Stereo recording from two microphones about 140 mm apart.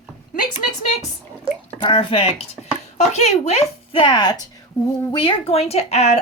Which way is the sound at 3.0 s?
55° left (ahead or behind).